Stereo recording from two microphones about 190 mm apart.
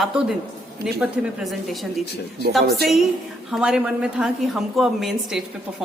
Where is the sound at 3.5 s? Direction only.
5° right (ahead or behind).